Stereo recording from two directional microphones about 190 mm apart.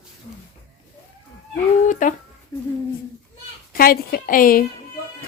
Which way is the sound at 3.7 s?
50° left (ahead or behind).